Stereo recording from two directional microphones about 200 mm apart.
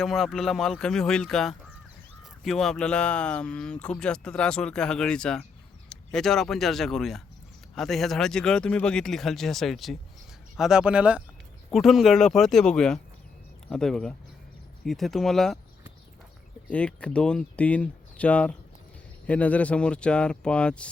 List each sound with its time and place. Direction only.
0.0 s speech: centre (ahead or behind)
16.6 s speech: 5° left (ahead or behind)